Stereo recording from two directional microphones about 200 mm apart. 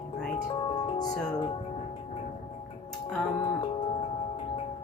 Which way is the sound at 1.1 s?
5° left (ahead or behind).